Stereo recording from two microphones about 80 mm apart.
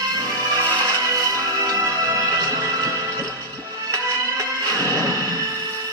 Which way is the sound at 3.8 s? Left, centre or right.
Right.